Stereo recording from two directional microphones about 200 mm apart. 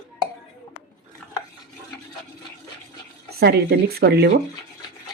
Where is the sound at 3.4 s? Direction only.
55° right (ahead or behind).